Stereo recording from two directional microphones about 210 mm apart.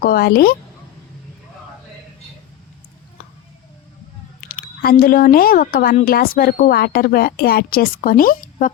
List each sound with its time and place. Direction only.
0.0 s speech: 45° left (ahead or behind)
4.4 s speech: 45° left (ahead or behind)